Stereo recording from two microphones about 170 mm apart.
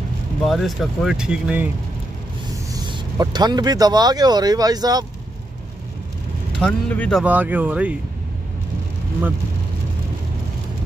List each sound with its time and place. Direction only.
0.5 s speech: centre (ahead or behind)
2.7 s speech: 25° right (ahead or behind)
6.6 s speech: 5° left (ahead or behind)
7.2 s speech: 10° right (ahead or behind)